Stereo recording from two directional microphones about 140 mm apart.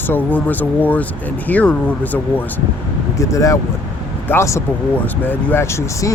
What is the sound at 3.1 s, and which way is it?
Speech, 25° left (ahead or behind).